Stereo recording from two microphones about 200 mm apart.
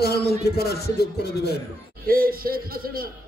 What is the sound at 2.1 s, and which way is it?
A man's voice, 45° right (ahead or behind).